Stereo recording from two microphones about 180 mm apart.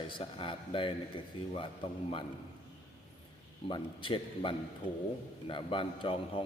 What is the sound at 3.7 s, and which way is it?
A man's voice, 25° left (ahead or behind).